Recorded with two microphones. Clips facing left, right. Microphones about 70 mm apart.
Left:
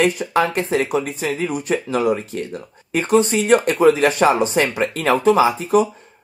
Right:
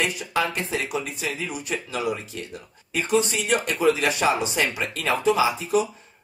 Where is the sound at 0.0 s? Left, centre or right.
Left.